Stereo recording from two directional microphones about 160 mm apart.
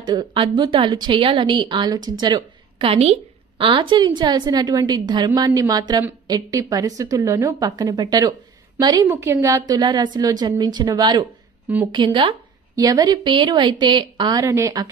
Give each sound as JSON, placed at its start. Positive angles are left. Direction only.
{"t": 0.0, "sound": "a woman's voice", "side_deg": -30}